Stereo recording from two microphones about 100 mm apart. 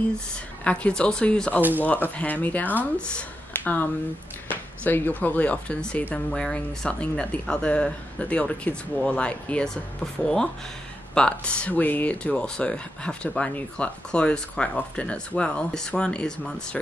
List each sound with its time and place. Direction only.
0.7 s speech: 10° left (ahead or behind)
4.5 s a sound: 20° left (ahead or behind)
5.2 s speech: 15° left (ahead or behind)